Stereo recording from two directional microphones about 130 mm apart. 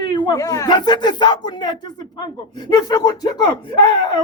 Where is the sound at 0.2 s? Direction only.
30° left (ahead or behind).